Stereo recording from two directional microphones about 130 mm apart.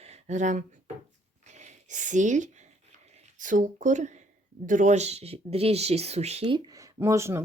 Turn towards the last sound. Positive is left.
turn(degrees=-20)  # may be behind; listen again after turning